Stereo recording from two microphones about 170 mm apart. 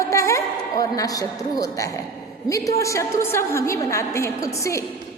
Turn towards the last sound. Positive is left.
turn(degrees=20)  # may be behind; listen again after turning